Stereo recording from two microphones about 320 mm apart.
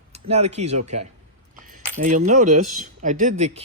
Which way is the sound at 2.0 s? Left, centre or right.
Right.